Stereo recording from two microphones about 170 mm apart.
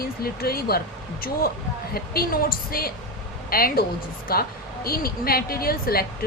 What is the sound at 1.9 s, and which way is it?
A woman's voice, 60° left (ahead or behind).